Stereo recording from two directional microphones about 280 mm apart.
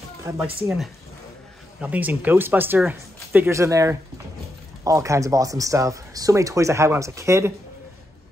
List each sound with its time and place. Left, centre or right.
0.2 s speech: centre